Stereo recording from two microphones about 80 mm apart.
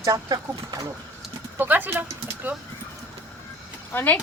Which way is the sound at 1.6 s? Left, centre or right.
Right.